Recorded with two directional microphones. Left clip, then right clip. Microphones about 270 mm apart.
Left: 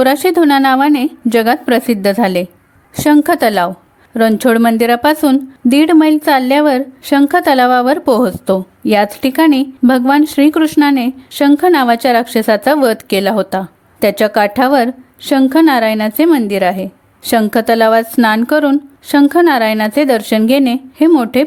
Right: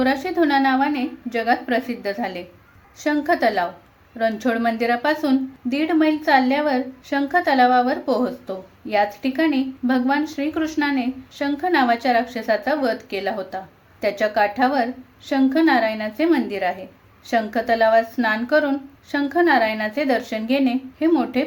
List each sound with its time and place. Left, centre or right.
0.0 s a woman's voice: left